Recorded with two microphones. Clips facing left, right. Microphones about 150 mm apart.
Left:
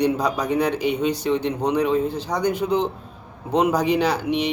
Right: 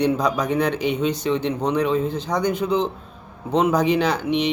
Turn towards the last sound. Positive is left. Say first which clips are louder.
# right 1 dB
turn(degrees=10)  # may be behind; listen again after turning